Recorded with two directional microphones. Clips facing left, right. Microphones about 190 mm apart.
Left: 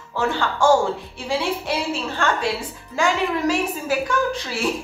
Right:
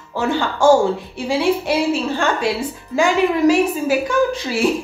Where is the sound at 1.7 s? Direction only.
10° right (ahead or behind).